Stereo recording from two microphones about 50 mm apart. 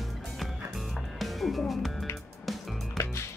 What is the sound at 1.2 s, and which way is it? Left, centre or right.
Music, centre.